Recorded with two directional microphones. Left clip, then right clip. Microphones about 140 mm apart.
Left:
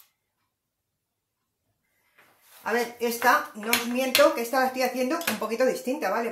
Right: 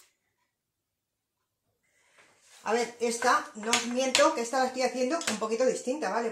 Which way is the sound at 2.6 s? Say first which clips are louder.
Left 2 dB; 15° right (ahead or behind).